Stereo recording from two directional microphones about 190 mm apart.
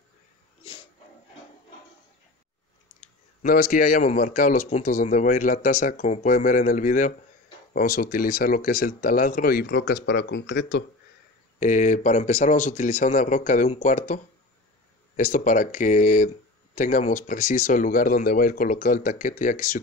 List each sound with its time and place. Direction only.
3.0 s speech: 50° left (ahead or behind)
11.6 s speech: 40° left (ahead or behind)